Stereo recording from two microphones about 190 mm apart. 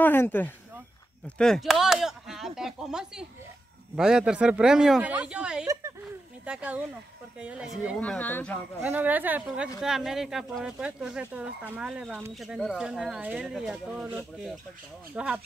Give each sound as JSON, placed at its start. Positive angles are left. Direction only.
{"t": 0.0, "sound": "speech", "side_deg": 10}
{"t": 5.7, "sound": "a sound", "side_deg": -15}
{"t": 6.4, "sound": "a woman's voice", "side_deg": -5}
{"t": 8.0, "sound": "speech", "side_deg": 10}
{"t": 8.8, "sound": "a woman's voice", "side_deg": -10}